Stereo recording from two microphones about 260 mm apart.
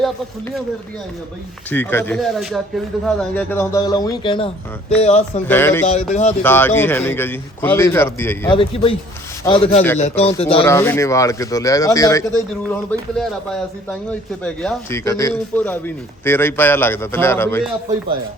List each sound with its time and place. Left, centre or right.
1.7 s speech: centre; by 5.4 s left
5.5 s speech: centre
5.8 s speech: left
6.4 s speech: centre
8.5 s speech: left
10.7 s speech: centre